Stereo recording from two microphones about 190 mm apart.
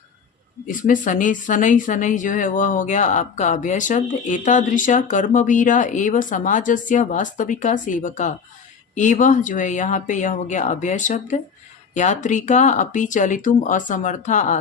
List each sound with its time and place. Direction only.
0.7 s speech: 45° left (ahead or behind)